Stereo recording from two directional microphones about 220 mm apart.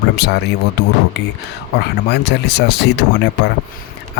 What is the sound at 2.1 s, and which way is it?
Speech, 50° left (ahead or behind).